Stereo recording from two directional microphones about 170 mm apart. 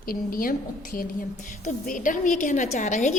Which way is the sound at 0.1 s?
55° left (ahead or behind).